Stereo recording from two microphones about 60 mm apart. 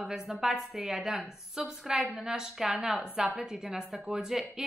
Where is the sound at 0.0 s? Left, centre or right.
Centre.